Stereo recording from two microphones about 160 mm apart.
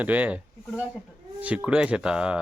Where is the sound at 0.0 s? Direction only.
10° right (ahead or behind).